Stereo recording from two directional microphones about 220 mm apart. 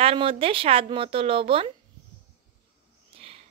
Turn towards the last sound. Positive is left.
turn(degrees=-25)  # may be behind; listen again after turning